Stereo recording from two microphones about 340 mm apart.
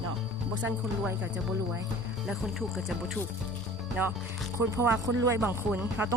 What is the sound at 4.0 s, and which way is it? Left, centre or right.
Speech, centre.